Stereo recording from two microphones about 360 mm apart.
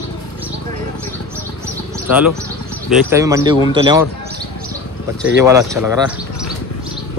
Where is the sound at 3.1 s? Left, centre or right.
Centre.